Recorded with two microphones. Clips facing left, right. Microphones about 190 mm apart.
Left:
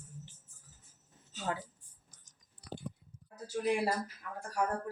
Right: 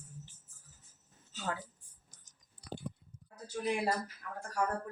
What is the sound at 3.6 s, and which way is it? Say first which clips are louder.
Speech: left 2 dB; 5° left (ahead or behind).